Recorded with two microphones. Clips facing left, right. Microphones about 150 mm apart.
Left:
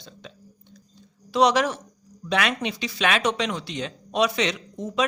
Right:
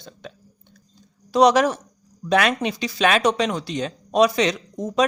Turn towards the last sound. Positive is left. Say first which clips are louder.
# right 5 dB
turn(degrees=-40)  # may be behind; listen again after turning